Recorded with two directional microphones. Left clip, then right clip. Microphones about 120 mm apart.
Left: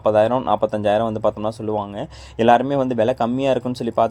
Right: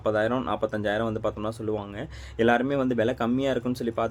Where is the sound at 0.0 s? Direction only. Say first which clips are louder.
Left 9 dB; 40° left (ahead or behind).